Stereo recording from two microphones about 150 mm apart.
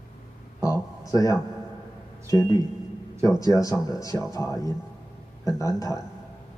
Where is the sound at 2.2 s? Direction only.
20° left (ahead or behind).